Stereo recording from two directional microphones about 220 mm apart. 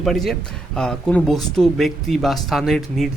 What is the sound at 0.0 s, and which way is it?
Speech, centre (ahead or behind).